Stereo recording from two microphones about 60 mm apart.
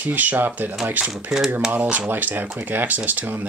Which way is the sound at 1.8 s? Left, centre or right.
Right.